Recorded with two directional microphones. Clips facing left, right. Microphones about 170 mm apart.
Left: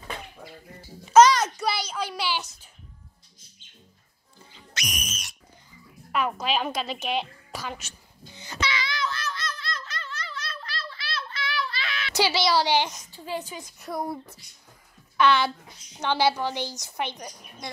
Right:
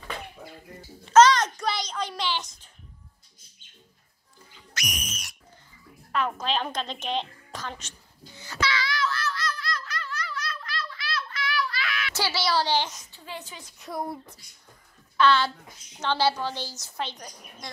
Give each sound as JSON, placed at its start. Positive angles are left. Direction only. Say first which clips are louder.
{"t": 0.7, "sound": "a sound", "louder": "left 1 dB", "side_deg": 10}
{"t": 4.7, "sound": "whistle", "louder": "even", "side_deg": 20}
{"t": 6.1, "sound": "a woman's voice", "louder": "left 1 dB", "side_deg": 10}
{"t": 8.4, "sound": "laughter", "louder": "right 1 dB", "side_deg": 20}
{"t": 12.2, "sound": "a woman's voice", "louder": "left 4 dB", "side_deg": 15}
{"t": 13.8, "sound": "speech", "louder": "left 2 dB", "side_deg": 0}
{"t": 15.1, "sound": "a woman's voice", "louder": "even", "side_deg": 15}